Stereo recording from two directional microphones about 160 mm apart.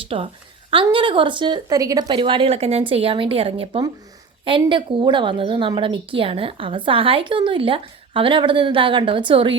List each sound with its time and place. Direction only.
0.0 s a woman's voice: 35° right (ahead or behind)